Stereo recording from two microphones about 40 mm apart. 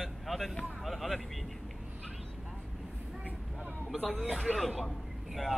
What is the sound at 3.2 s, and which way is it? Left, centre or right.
Vehicle, right.